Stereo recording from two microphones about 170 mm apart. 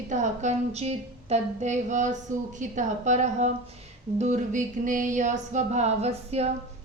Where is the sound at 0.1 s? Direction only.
45° right (ahead or behind).